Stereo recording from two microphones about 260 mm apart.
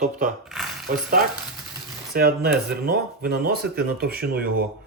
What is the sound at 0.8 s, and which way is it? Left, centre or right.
Speech, right.